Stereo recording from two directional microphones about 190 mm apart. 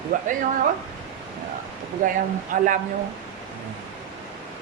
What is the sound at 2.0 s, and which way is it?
Speech, 45° right (ahead or behind).